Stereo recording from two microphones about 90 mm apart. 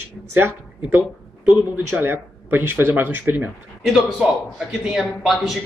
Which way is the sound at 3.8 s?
5° right (ahead or behind).